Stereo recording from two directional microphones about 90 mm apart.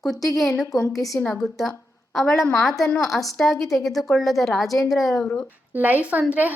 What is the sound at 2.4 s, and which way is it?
Speech, 35° left (ahead or behind).